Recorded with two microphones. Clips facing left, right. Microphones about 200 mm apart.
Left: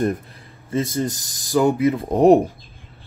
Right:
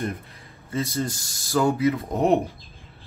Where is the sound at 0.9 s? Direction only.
20° left (ahead or behind).